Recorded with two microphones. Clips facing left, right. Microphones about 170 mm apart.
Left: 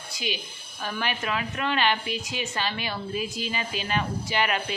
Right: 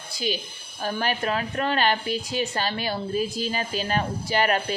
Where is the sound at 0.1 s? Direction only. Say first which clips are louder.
Right 5 dB; 35° right (ahead or behind).